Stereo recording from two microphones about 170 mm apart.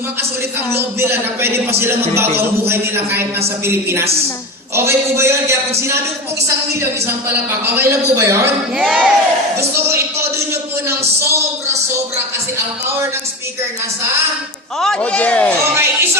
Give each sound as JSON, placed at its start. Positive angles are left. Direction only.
{"t": 0.7, "sound": "a man's voice", "side_deg": -15}
{"t": 7.1, "sound": "a man's voice", "side_deg": -15}
{"t": 8.8, "sound": "speech", "side_deg": -5}
{"t": 9.7, "sound": "a sound", "side_deg": -15}
{"t": 11.2, "sound": "a man's voice", "side_deg": -15}
{"t": 14.8, "sound": "a man's voice", "side_deg": 5}
{"t": 15.7, "sound": "a man's voice", "side_deg": -15}